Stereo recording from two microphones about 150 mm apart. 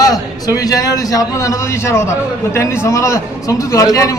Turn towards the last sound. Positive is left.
turn(degrees=25)  # may be behind; listen again after turning